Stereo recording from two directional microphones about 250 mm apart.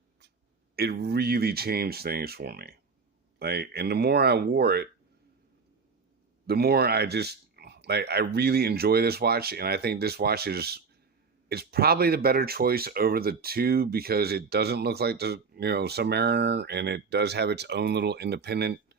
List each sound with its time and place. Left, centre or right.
0.8 s speech: right
6.5 s speech: right